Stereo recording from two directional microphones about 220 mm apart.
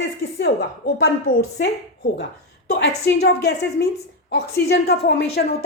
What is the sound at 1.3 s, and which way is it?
A woman's voice, 50° left (ahead or behind).